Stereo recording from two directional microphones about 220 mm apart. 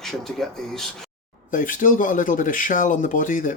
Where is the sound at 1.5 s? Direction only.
35° left (ahead or behind).